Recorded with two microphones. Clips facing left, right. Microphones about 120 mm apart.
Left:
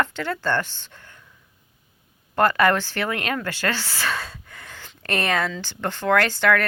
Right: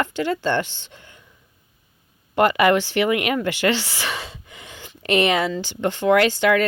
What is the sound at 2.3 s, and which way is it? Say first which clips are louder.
Speech: right 2 dB; 15° right (ahead or behind).